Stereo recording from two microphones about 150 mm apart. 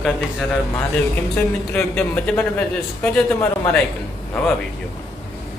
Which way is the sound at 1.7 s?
5° left (ahead or behind).